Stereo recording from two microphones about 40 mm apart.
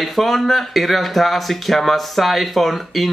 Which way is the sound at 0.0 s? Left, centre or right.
Centre.